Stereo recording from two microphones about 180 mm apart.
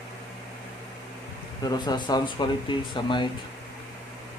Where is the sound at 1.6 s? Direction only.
20° left (ahead or behind).